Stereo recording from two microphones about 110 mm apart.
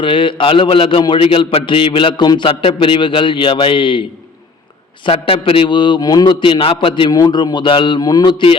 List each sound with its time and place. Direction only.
0.0 s a man's voice: 50° left (ahead or behind)
2.5 s a man's voice: 60° left (ahead or behind)
5.0 s a man's voice: 60° left (ahead or behind); by 6.3 s 35° left (ahead or behind)
6.4 s a man's voice: 55° left (ahead or behind)